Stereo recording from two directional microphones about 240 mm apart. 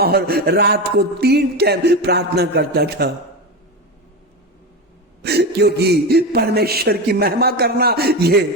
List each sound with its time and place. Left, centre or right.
0.0 s a man's voice: right
5.2 s a man's voice: right